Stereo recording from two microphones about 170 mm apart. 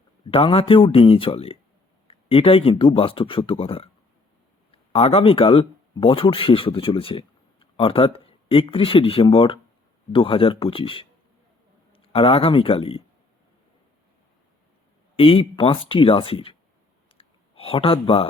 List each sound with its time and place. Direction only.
0.3 s a man's voice: 30° left (ahead or behind)
15.1 s speech: 35° left (ahead or behind)
17.2 s a sound: 35° left (ahead or behind)